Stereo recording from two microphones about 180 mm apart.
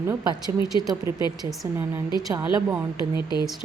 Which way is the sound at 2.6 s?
10° right (ahead or behind).